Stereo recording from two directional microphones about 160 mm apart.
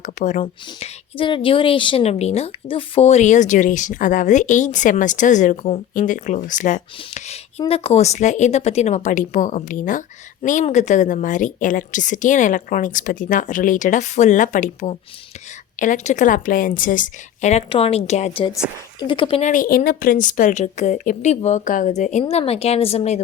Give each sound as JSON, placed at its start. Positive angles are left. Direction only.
{"t": 0.0, "sound": "speech", "side_deg": 50}
{"t": 1.1, "sound": "speech", "side_deg": 30}
{"t": 17.7, "sound": "a woman's voice", "side_deg": 35}
{"t": 18.9, "sound": "a woman's voice", "side_deg": 30}
{"t": 19.4, "sound": "a woman's voice", "side_deg": 55}